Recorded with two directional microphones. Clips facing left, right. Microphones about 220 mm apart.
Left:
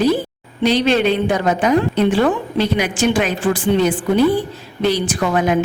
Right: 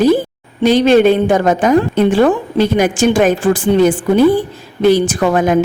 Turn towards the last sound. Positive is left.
turn(degrees=-45)  # may be behind; listen again after turning